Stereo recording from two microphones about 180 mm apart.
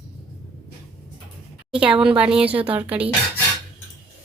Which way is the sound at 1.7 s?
5° right (ahead or behind).